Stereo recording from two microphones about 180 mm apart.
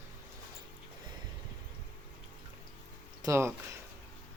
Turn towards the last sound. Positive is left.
turn(degrees=-15)  # may be behind; listen again after turning